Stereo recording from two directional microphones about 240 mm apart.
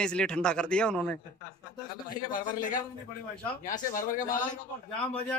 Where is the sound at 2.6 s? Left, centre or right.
Left.